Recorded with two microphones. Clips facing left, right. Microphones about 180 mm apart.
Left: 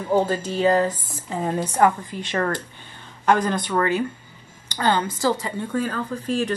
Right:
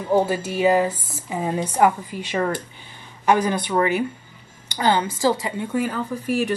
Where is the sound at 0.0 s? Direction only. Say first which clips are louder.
Right 1 dB; 10° right (ahead or behind).